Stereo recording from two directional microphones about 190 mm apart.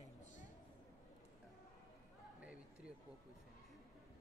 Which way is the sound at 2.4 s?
5° right (ahead or behind).